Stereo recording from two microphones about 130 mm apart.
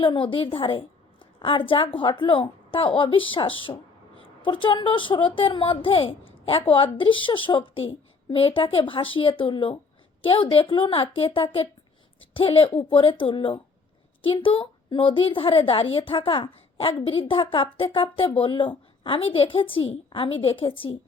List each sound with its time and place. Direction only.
0.0 s a woman's voice: 40° left (ahead or behind)